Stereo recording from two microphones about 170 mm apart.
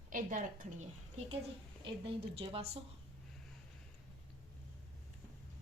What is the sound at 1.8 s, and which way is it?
Speech, 30° right (ahead or behind).